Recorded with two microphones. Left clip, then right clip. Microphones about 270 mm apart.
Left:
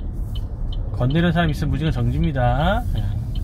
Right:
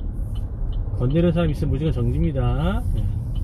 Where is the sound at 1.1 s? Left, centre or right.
Left.